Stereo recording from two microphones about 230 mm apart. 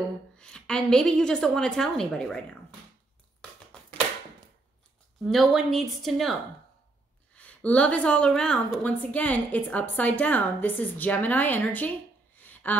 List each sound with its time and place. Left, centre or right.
0.4 s a woman's voice: centre
5.2 s a woman's voice: centre
7.3 s a woman's voice: centre
12.4 s a sound: centre